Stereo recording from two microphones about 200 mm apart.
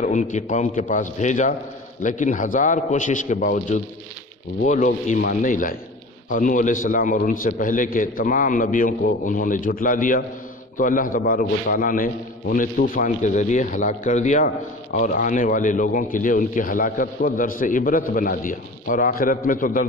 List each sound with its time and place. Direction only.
0.0 s a man's voice: 40° left (ahead or behind)